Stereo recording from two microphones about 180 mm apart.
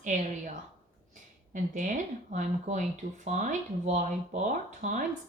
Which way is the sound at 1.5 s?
45° right (ahead or behind).